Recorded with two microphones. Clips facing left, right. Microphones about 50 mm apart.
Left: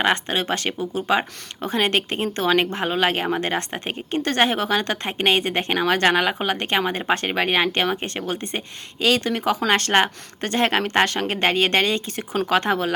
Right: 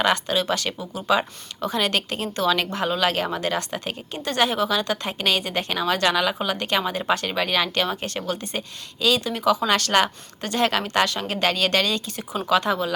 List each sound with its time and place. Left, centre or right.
0.0 s a woman's voice: left
4.2 s a woman's voice: left